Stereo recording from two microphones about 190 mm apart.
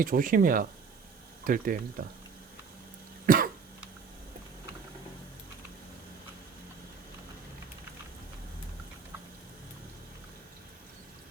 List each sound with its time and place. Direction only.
0.0 s speech: 45° right (ahead or behind)
3.2 s cough: 50° right (ahead or behind)